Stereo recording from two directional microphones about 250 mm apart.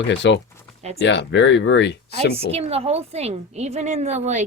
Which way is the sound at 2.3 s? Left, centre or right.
Right.